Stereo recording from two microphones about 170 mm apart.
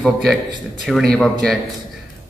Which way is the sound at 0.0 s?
Centre (ahead or behind).